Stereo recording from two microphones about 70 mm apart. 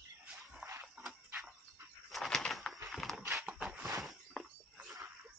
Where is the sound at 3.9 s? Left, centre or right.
Centre.